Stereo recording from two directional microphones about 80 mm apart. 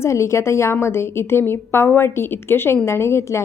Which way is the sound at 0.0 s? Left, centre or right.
Left.